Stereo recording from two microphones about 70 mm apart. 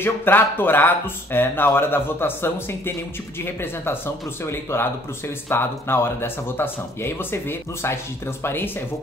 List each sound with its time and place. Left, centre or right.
0.0 s speech: left